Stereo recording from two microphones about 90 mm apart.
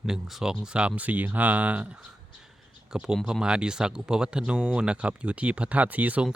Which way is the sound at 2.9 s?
10° right (ahead or behind).